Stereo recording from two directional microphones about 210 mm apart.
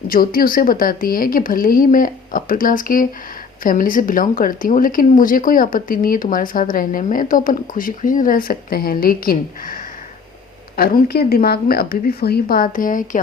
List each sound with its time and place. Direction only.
0.1 s speech: 45° left (ahead or behind)